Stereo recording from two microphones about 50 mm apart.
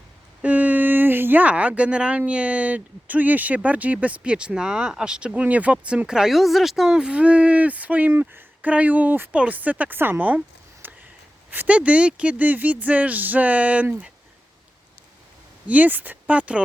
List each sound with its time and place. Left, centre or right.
0.4 s a sound: right
1.5 s speech: right
4.2 s speech: centre
6.1 s speech: centre; by 8.1 s right
8.1 s speech: right
8.6 s speech: right
9.9 s speech: right
10.8 s a sound: right
11.7 s speech: right
15.6 s speech: right